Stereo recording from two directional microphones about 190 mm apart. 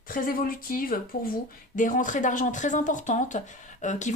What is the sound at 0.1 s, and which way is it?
A woman's voice, 50° left (ahead or behind).